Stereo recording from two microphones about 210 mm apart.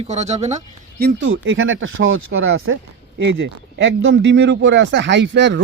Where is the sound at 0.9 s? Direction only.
55° right (ahead or behind); by 2.7 s 70° right (ahead or behind).